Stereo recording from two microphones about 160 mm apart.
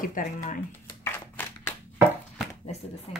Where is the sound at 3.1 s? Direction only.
40° left (ahead or behind).